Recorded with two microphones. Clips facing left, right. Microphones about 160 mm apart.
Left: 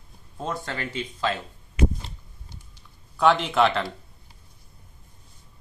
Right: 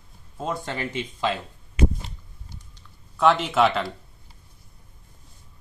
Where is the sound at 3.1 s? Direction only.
Centre (ahead or behind).